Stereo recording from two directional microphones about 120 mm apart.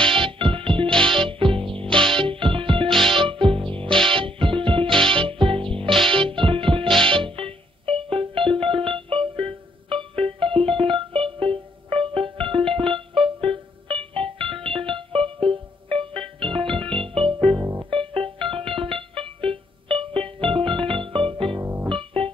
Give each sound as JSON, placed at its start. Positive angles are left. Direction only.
{"t": 0.0, "sound": "music", "side_deg": -45}